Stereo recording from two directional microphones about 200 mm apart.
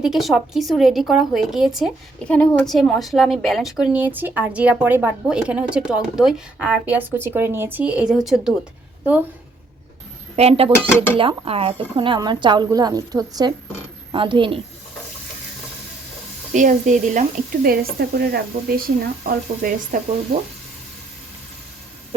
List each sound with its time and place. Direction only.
0.0 s a woman's voice: centre (ahead or behind)
10.3 s a woman's voice: 30° right (ahead or behind)
16.5 s speech: 40° right (ahead or behind)